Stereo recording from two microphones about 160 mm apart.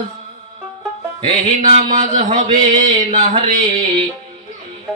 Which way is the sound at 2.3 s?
50° right (ahead or behind).